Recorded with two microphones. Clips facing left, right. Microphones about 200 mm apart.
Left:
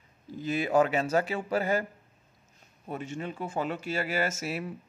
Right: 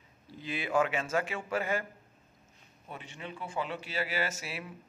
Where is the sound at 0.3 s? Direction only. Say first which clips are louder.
Left 6 dB; 45° left (ahead or behind).